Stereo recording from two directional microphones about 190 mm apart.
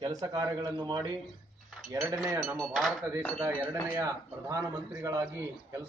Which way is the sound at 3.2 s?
10° left (ahead or behind).